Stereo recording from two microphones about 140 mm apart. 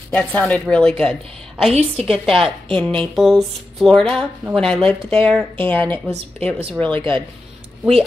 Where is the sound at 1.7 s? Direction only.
50° right (ahead or behind).